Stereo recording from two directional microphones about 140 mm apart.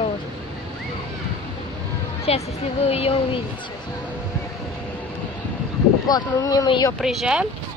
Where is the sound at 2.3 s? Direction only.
45° left (ahead or behind).